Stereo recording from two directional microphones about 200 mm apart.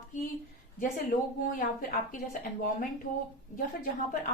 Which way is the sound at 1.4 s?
45° left (ahead or behind).